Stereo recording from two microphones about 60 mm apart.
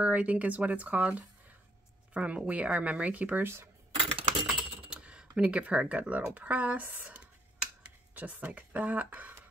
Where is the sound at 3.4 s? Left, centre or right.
Right.